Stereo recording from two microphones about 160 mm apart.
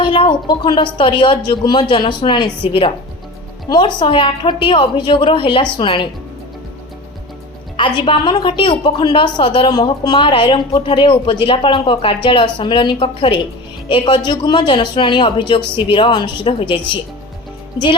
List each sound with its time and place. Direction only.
0.0 s a woman's voice: 30° left (ahead or behind)
7.8 s a woman's voice: 30° left (ahead or behind)